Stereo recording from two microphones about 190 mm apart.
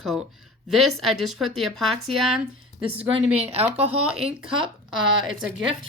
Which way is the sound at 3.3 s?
30° right (ahead or behind).